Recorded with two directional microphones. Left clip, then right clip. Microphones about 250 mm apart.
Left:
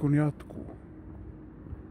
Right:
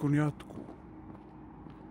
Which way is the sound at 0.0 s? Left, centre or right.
Centre.